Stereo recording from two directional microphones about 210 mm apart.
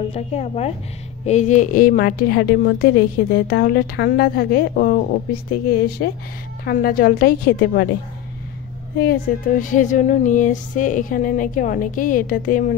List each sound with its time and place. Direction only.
0.1 s a woman's voice: 30° left (ahead or behind); by 7.9 s 50° left (ahead or behind)
8.9 s speech: 45° left (ahead or behind)